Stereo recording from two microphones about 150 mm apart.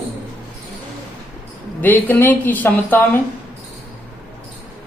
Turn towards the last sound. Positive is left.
turn(degrees=15)  # may be behind; listen again after turning